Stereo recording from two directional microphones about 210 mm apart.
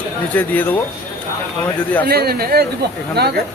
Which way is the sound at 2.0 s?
50° right (ahead or behind).